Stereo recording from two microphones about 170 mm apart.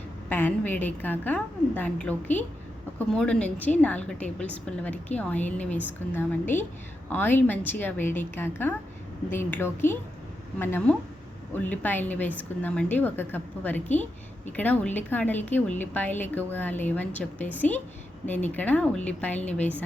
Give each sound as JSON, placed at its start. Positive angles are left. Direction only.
{"t": 0.3, "sound": "a woman's voice", "side_deg": 10}